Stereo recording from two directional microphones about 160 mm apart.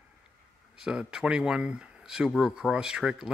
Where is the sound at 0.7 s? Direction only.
5° right (ahead or behind).